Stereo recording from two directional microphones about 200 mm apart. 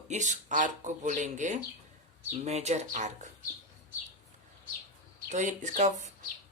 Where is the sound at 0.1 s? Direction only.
35° right (ahead or behind).